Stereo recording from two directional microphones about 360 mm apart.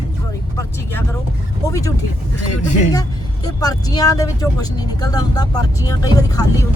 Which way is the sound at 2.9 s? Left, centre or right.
Centre.